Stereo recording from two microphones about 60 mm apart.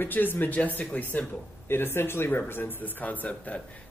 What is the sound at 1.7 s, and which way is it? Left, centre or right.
Speech, left.